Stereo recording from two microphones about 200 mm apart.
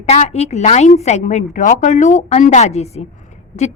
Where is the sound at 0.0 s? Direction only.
35° left (ahead or behind).